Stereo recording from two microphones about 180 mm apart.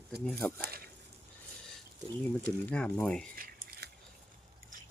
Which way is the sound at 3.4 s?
55° right (ahead or behind).